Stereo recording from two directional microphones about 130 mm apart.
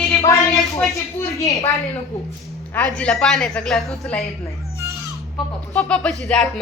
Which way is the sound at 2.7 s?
10° left (ahead or behind).